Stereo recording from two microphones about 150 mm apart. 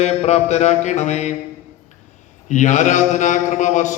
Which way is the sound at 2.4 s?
55° left (ahead or behind).